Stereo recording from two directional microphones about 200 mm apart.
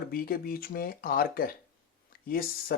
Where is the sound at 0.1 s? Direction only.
45° left (ahead or behind).